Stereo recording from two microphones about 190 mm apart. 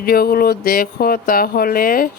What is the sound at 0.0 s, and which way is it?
Speech, 55° left (ahead or behind).